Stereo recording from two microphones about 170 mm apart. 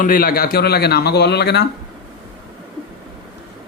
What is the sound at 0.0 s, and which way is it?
Speech, 55° left (ahead or behind).